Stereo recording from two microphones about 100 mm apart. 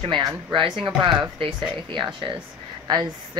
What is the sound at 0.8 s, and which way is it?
A woman's voice, 50° right (ahead or behind).